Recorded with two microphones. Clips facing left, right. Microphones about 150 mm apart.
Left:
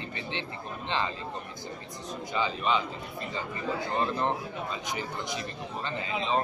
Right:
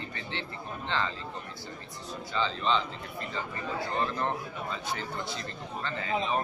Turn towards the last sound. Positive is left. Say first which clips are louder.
# left 1 dB
turn(degrees=20)  # may be behind; listen again after turning